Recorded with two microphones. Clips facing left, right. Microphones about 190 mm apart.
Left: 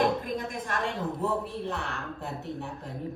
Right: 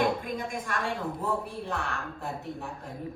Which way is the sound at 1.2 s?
Centre (ahead or behind).